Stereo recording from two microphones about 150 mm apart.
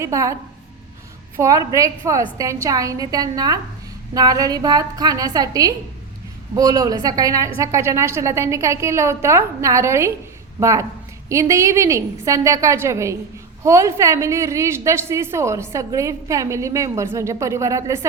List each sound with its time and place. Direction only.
0.0 s a woman's voice: 20° right (ahead or behind)
1.4 s a woman's voice: 20° right (ahead or behind)